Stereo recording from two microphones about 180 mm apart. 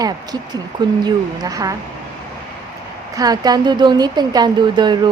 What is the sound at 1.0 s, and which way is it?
Speech, 20° right (ahead or behind).